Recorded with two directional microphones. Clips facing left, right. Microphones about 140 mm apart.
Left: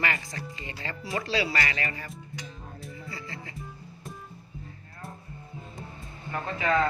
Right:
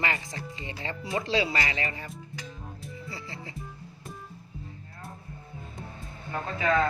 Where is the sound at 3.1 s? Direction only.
25° right (ahead or behind).